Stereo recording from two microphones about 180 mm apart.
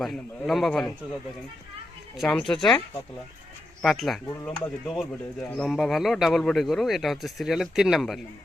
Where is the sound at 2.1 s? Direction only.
Centre (ahead or behind).